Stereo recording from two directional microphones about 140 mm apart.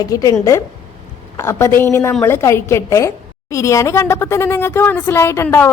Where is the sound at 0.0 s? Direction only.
25° left (ahead or behind).